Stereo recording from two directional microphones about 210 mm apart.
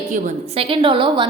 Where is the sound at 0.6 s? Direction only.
25° right (ahead or behind).